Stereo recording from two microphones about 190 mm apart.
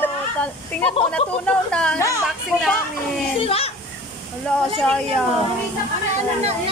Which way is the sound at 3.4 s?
30° left (ahead or behind).